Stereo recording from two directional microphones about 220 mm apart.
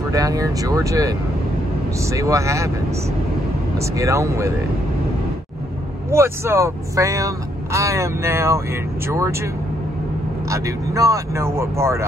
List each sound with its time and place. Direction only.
0.1 s speech: 15° right (ahead or behind)
3.7 s speech: 15° right (ahead or behind)
6.0 s speech: 10° right (ahead or behind)
10.5 s speech: 15° right (ahead or behind)